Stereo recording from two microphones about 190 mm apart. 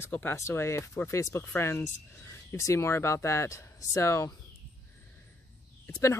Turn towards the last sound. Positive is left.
turn(degrees=15)  # may be behind; listen again after turning